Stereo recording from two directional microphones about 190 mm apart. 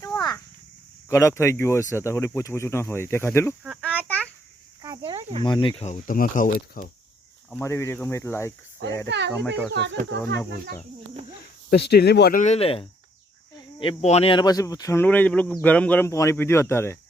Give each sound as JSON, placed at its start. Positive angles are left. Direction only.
{"t": 0.1, "sound": "a sound", "side_deg": 5}
{"t": 1.1, "sound": "speech", "side_deg": 15}
{"t": 3.6, "sound": "a sound", "side_deg": -5}
{"t": 4.8, "sound": "cricket", "side_deg": -20}
{"t": 5.4, "sound": "speech", "side_deg": 25}
{"t": 5.9, "sound": "speech", "side_deg": 45}
{"t": 7.5, "sound": "speech", "side_deg": 15}
{"t": 9.0, "sound": "speech", "side_deg": -65}
{"t": 11.7, "sound": "speech", "side_deg": 60}
{"t": 12.4, "sound": "speech", "side_deg": 35}